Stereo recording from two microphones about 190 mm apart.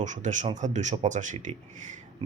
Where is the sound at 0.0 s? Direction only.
40° right (ahead or behind).